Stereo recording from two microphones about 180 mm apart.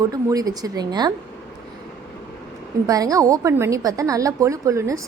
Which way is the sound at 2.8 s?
20° right (ahead or behind).